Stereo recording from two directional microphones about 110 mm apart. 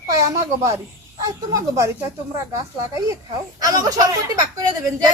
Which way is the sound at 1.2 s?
30° right (ahead or behind).